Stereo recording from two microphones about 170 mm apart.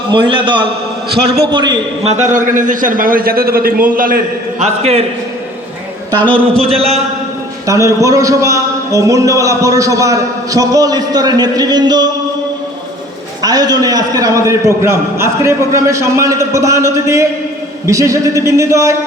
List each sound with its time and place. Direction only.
0.1 s a man's voice: 30° right (ahead or behind)
1.1 s a man's voice: 70° right (ahead or behind)
1.5 s a man's voice: 25° right (ahead or behind)
2.0 s a man's voice: 45° right (ahead or behind)
4.6 s a man's voice: 40° right (ahead or behind)
6.1 s a man's voice: 10° left (ahead or behind)
7.7 s a man's voice: 20° right (ahead or behind)
13.4 s a man's voice: 20° right (ahead or behind)